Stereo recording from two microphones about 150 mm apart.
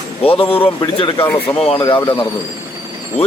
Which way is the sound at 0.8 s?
35° left (ahead or behind).